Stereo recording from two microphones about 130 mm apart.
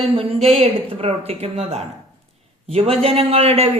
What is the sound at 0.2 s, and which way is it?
A man's voice, 50° right (ahead or behind).